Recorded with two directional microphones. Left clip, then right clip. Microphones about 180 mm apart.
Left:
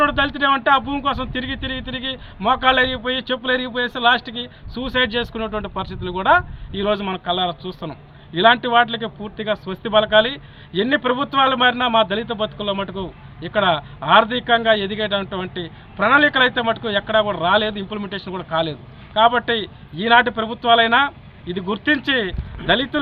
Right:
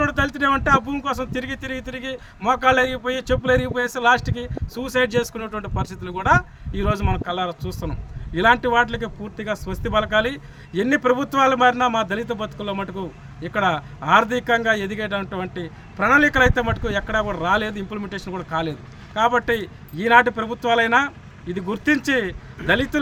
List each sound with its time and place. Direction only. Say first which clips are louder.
0.0 s speech: left 3 dB; 25° right (ahead or behind)